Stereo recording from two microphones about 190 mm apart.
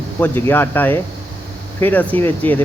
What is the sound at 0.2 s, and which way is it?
Speech, 10° left (ahead or behind).